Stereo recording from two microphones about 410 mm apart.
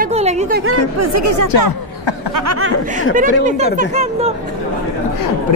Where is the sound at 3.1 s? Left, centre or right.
Centre.